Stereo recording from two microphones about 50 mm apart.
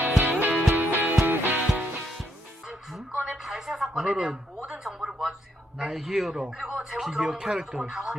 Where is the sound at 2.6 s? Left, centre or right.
Centre.